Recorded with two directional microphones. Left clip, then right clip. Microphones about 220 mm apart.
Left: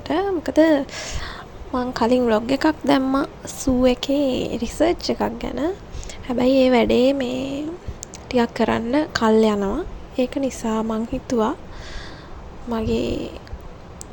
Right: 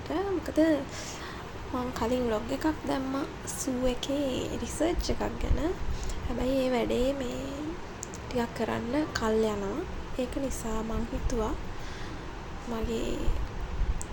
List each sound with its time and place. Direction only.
0.1 s a woman's voice: 40° left (ahead or behind)
12.7 s a woman's voice: 40° left (ahead or behind)